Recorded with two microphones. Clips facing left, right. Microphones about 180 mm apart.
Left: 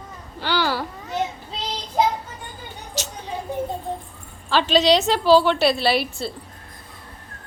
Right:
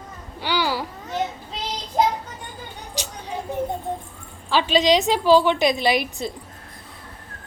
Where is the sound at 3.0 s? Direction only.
15° right (ahead or behind).